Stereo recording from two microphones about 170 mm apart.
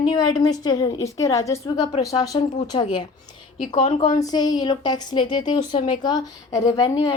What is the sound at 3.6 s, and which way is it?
Speech, 45° left (ahead or behind).